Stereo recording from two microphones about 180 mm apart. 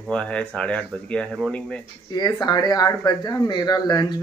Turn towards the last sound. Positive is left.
turn(degrees=20)  # may be behind; listen again after turning